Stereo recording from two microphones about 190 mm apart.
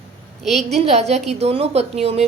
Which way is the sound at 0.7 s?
35° right (ahead or behind).